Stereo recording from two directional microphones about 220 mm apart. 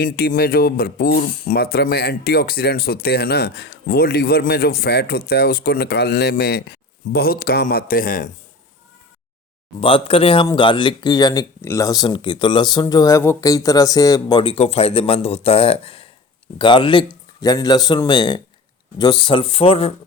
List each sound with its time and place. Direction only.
0.0 s speech: 40° left (ahead or behind)
9.8 s speech: 25° left (ahead or behind)